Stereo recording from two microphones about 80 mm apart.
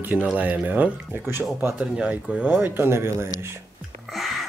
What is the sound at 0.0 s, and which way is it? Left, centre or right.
Speech, right.